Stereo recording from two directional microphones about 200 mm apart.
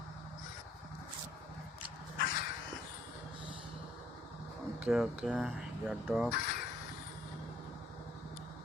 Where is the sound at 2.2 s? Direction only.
45° left (ahead or behind).